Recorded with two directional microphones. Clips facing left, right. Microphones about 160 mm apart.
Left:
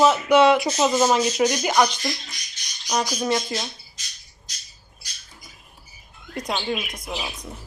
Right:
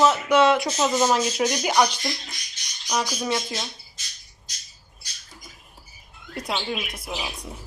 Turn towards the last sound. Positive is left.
turn(degrees=-5)  # may be behind; listen again after turning